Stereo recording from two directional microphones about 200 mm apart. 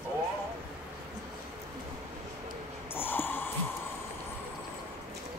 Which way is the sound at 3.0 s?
10° left (ahead or behind).